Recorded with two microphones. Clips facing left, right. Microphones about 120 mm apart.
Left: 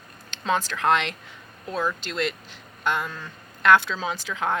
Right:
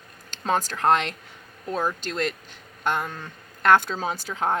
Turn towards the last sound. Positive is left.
turn(degrees=-40)  # may be behind; listen again after turning